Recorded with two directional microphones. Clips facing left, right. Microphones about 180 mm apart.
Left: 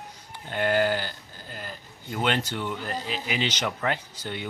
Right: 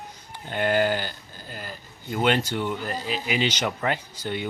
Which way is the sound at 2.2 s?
10° right (ahead or behind).